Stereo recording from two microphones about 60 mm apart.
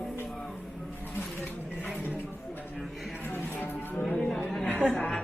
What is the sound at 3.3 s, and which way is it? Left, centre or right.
Music, left.